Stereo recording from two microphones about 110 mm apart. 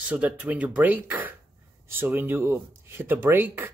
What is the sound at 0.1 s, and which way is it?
Speech, 10° right (ahead or behind).